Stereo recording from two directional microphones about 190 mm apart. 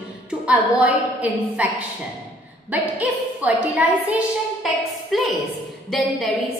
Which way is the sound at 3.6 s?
5° right (ahead or behind).